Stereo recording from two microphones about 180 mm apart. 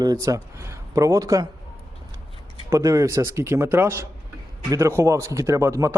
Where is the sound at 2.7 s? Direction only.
20° right (ahead or behind).